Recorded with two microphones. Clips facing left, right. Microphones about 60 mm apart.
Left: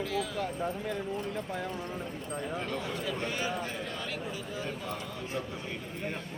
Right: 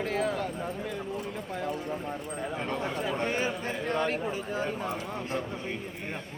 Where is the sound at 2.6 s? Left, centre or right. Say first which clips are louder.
Right 3 dB; right.